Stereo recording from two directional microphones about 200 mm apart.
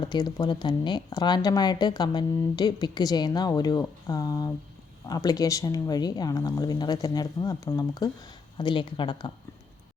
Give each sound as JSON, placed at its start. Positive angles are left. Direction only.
{"t": 0.0, "sound": "speech", "side_deg": 20}